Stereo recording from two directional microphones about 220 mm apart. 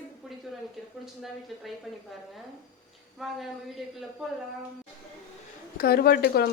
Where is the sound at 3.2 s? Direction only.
Centre (ahead or behind).